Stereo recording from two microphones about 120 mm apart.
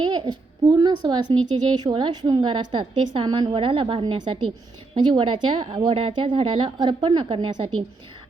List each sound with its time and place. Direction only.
0.3 s a woman's voice: 35° right (ahead or behind)